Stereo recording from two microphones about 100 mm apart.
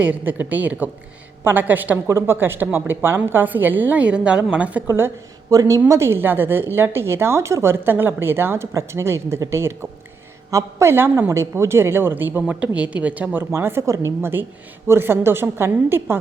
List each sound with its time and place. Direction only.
0.0 s a woman's voice: 15° right (ahead or behind)
13.4 s a woman's voice: 25° right (ahead or behind)